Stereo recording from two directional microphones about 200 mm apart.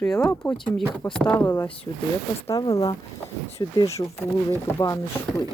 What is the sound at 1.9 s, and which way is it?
Speech, 20° left (ahead or behind).